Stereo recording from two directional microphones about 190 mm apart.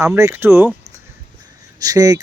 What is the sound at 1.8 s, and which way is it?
Speech, 20° right (ahead or behind).